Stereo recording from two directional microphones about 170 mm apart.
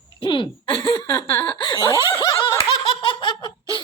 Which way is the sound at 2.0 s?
20° left (ahead or behind).